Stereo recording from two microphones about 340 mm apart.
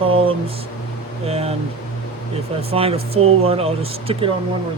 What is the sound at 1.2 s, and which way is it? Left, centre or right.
Speech, centre.